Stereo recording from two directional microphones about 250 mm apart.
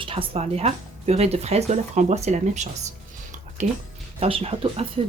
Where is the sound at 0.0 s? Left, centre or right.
Right.